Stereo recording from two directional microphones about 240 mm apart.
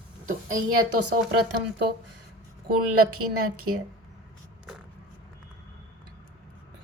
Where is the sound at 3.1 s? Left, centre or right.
Right.